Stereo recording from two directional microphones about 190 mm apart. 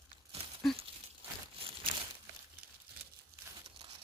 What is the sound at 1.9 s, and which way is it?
Crumpling, 45° right (ahead or behind).